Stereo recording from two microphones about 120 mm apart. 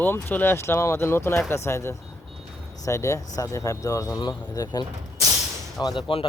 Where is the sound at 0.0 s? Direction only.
15° left (ahead or behind); by 4.9 s 30° left (ahead or behind).